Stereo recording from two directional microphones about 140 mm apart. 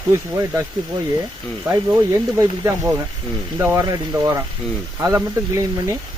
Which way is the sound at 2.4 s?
20° right (ahead or behind).